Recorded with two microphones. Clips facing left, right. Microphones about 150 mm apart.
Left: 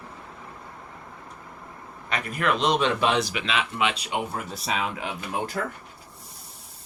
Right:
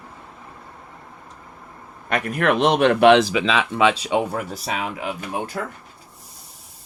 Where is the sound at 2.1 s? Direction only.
55° right (ahead or behind).